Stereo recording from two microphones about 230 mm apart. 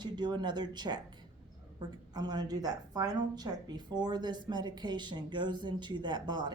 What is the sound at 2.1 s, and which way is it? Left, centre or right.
Speech, centre.